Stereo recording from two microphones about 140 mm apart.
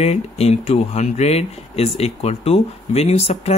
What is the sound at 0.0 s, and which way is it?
Speech, 50° left (ahead or behind).